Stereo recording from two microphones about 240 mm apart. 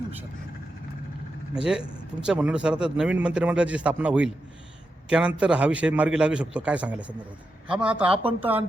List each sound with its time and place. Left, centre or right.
1.5 s speech: centre
8.1 s speech: right
8.4 s speech: centre